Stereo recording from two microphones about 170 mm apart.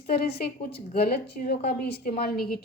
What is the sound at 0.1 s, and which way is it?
A woman's voice, 65° left (ahead or behind).